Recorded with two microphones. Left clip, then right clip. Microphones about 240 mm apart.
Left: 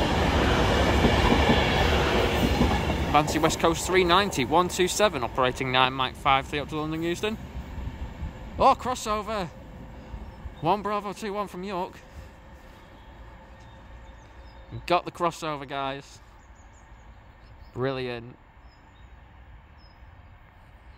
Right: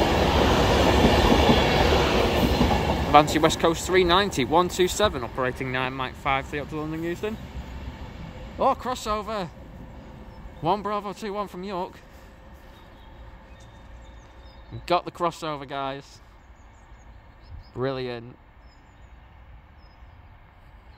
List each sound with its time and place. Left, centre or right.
0.0 s train: right
3.1 s speech: centre
8.7 s speech: centre
10.6 s speech: centre
14.9 s speech: centre
17.7 s speech: centre